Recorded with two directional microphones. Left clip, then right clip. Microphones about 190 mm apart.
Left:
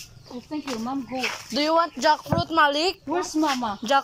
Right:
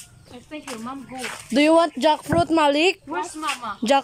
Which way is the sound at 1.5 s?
30° right (ahead or behind).